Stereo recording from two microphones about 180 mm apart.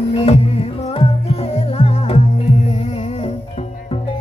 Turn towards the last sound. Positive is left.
turn(degrees=35)  # may be behind; listen again after turning